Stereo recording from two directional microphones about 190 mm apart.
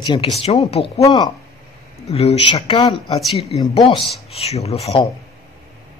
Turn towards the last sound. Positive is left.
turn(degrees=30)  # may be behind; listen again after turning